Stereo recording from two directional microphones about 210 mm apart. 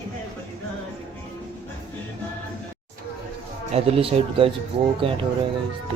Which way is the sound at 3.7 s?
25° right (ahead or behind).